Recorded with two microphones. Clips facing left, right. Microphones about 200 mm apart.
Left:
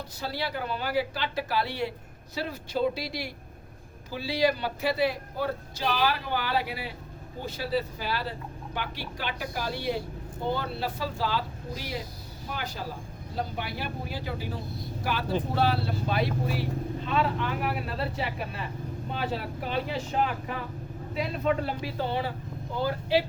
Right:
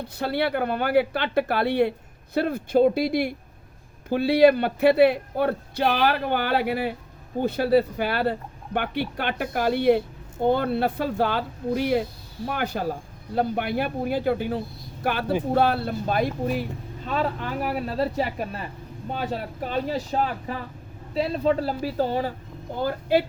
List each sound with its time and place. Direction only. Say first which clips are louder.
0.0 s speech: right 8 dB; 60° right (ahead or behind)